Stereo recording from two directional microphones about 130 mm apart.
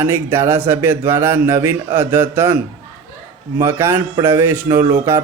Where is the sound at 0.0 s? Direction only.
20° right (ahead or behind).